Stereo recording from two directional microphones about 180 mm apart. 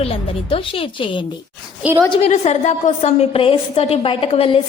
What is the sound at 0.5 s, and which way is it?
Speech, 30° left (ahead or behind).